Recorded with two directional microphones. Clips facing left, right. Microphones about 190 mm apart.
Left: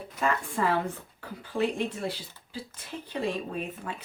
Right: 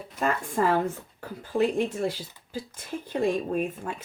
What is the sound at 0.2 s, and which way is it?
A woman's voice, 45° right (ahead or behind).